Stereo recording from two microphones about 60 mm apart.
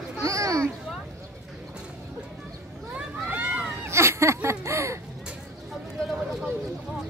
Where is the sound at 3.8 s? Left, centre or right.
Right.